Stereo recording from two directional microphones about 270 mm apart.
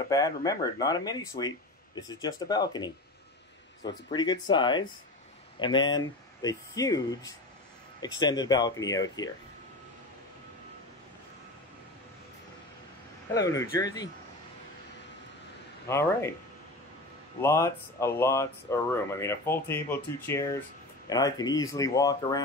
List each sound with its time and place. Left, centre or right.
0.1 s speech: centre
13.3 s speech: centre
15.9 s speech: centre
17.4 s speech: centre